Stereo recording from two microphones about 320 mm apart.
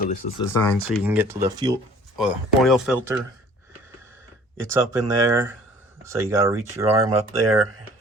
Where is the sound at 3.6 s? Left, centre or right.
Centre.